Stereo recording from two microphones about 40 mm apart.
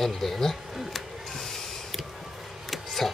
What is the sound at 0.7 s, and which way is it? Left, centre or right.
Speech, centre.